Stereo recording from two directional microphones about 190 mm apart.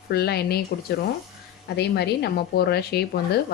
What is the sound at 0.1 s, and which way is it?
Speech, 60° left (ahead or behind).